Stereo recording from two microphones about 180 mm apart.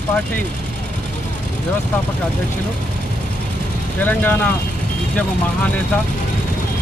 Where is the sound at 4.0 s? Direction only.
10° left (ahead or behind).